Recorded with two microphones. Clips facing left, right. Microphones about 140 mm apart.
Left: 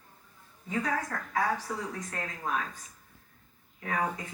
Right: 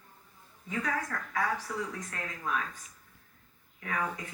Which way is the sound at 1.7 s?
30° left (ahead or behind).